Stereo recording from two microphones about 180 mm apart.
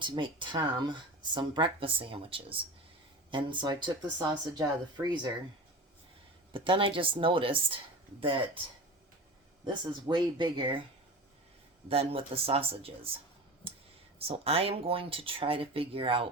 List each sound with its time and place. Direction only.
0.0 s speech: 25° right (ahead or behind)
6.5 s speech: 30° right (ahead or behind)
9.6 s speech: 25° right (ahead or behind)
11.9 s speech: 30° right (ahead or behind)
14.2 s speech: 35° right (ahead or behind)